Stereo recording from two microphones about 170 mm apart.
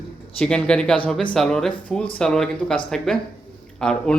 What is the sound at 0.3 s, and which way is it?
Speech, 5° left (ahead or behind).